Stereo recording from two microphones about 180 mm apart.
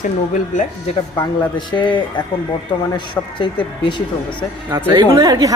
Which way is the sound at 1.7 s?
25° left (ahead or behind).